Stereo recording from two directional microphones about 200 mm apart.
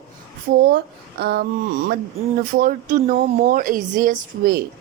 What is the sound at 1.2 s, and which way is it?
Speech, 50° right (ahead or behind).